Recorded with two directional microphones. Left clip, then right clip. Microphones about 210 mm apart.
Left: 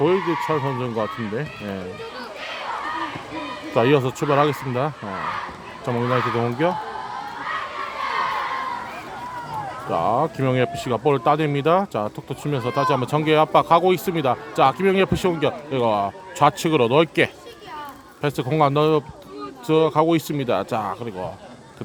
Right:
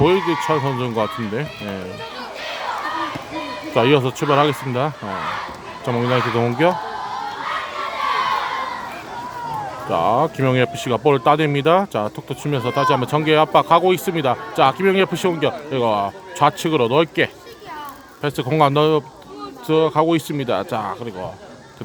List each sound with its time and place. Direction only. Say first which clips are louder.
0.0 s speech: right 3 dB; 5° right (ahead or behind)
3.8 s speech: right 2 dB; centre (ahead or behind)
9.9 s speech: right 3 dB; 5° right (ahead or behind)